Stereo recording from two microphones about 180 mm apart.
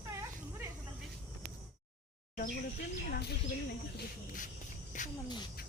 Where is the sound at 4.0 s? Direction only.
50° left (ahead or behind).